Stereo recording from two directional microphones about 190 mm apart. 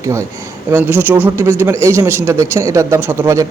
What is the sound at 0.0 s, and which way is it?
A man's voice, 15° right (ahead or behind).